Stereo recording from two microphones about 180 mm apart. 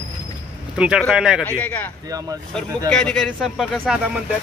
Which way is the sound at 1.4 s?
10° left (ahead or behind).